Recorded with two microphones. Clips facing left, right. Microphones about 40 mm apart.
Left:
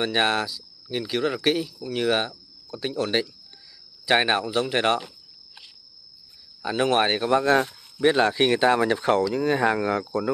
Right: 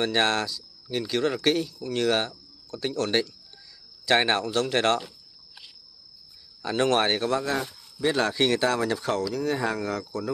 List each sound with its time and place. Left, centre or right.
0.0 s speech: centre
6.6 s speech: centre
7.4 s speech: left
8.1 s speech: centre